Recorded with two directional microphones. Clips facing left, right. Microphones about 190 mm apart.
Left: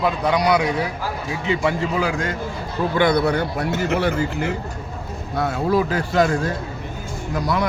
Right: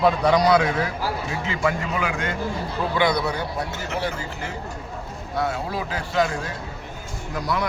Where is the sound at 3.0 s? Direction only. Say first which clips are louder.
Left 5 dB; 55° left (ahead or behind).